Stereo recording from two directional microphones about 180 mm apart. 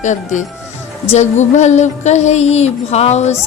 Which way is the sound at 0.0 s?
40° left (ahead or behind).